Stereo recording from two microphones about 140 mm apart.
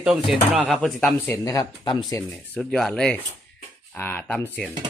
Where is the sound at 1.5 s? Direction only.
30° left (ahead or behind).